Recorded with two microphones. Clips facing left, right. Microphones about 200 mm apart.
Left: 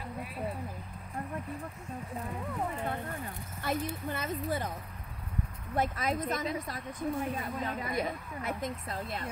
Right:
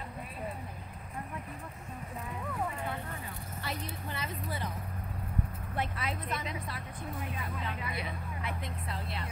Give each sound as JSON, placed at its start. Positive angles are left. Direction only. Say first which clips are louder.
{"t": 3.6, "sound": "a woman's voice", "louder": "left 7 dB", "side_deg": 50}
{"t": 5.8, "sound": "a woman's voice", "louder": "left 6 dB", "side_deg": 40}